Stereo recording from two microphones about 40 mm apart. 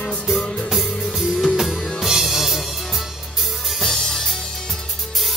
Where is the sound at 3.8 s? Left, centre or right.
Centre.